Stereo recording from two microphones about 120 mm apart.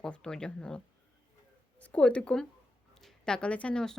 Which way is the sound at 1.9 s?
10° left (ahead or behind).